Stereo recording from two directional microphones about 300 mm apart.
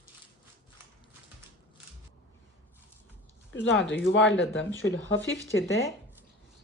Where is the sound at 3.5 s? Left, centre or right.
Left.